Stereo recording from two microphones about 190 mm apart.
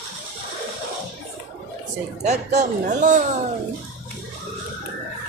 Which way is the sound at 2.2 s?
35° right (ahead or behind).